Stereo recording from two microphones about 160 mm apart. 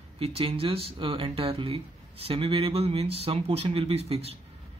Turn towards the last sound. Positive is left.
turn(degrees=-40)  # may be behind; listen again after turning